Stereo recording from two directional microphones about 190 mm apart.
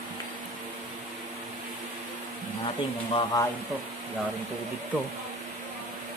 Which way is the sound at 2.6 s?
25° left (ahead or behind).